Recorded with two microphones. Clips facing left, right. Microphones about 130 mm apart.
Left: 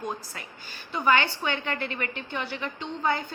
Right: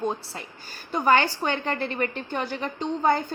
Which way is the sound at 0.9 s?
45° right (ahead or behind).